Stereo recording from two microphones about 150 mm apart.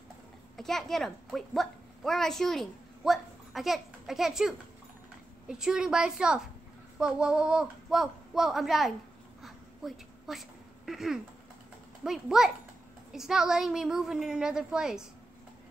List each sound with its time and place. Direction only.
0.6 s a woman's voice: centre (ahead or behind)
9.4 s a sound: centre (ahead or behind)
10.9 s a woman's voice: centre (ahead or behind)